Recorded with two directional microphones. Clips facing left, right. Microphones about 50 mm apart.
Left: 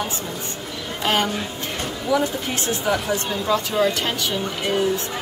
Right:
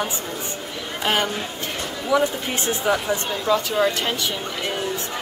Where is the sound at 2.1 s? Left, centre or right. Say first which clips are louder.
Right 1 dB; centre.